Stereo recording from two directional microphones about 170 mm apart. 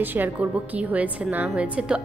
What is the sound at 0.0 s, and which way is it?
A woman's voice, 10° right (ahead or behind).